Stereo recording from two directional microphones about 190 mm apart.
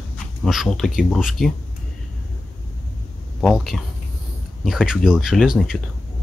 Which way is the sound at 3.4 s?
Centre (ahead or behind).